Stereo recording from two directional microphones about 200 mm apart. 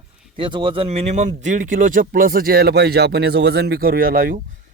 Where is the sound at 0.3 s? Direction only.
25° right (ahead or behind).